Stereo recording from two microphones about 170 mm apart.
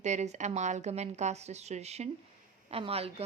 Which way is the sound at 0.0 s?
45° right (ahead or behind).